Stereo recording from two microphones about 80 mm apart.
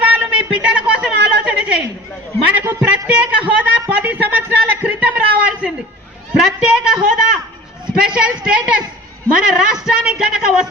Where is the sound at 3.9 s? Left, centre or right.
Centre.